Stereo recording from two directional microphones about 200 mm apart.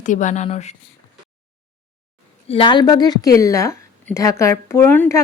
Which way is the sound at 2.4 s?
25° left (ahead or behind).